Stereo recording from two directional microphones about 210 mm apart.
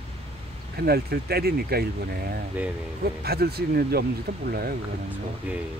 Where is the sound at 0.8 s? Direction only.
45° right (ahead or behind).